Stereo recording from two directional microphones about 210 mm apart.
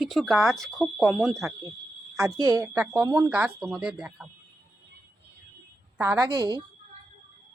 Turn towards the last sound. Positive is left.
turn(degrees=-20)  # may be behind; listen again after turning